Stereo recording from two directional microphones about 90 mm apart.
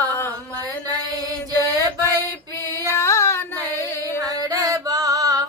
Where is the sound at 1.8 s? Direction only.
45° right (ahead or behind).